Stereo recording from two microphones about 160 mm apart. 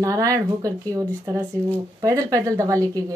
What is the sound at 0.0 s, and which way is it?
Female singing, 20° right (ahead or behind).